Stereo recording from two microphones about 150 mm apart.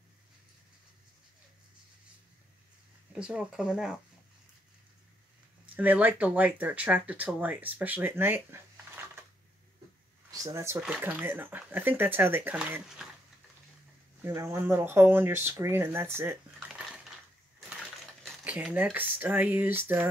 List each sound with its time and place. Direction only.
3.1 s speech: 5° right (ahead or behind)
5.8 s speech: 10° right (ahead or behind)
10.3 s speech: 20° right (ahead or behind); by 13.1 s 5° right (ahead or behind)
14.2 s speech: 15° right (ahead or behind)
16.5 s cutlery: 5° right (ahead or behind)
18.2 s speech: 10° right (ahead or behind)